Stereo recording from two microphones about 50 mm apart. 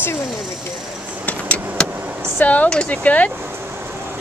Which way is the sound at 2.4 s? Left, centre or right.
Left.